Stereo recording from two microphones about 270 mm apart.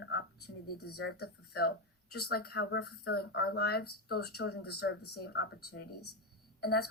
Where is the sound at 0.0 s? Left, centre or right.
Left.